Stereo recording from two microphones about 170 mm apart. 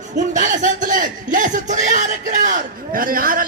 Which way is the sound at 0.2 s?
50° right (ahead or behind).